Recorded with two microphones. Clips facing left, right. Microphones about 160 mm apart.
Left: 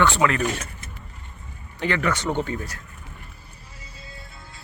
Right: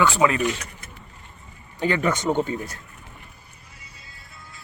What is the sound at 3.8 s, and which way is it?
Music, 25° left (ahead or behind).